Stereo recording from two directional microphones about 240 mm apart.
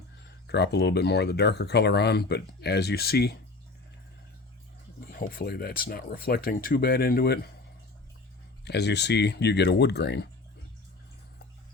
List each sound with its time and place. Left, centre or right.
0.4 s speech: left
5.1 s speech: left
8.6 s speech: left